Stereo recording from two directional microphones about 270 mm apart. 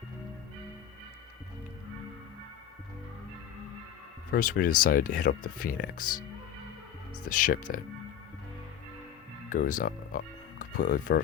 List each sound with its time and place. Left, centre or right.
4.3 s speech: left
7.3 s speech: left
9.5 s speech: left